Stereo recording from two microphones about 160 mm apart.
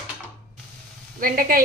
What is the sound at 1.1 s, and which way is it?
Speech, 60° right (ahead or behind).